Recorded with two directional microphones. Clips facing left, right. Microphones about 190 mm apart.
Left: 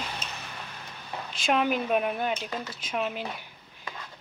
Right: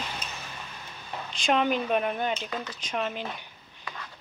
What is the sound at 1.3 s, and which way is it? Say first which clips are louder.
Speech: right 1 dB; 5° left (ahead or behind).